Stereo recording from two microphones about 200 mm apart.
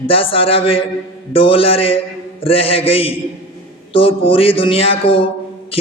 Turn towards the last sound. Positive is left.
turn(degrees=25)  # may be behind; listen again after turning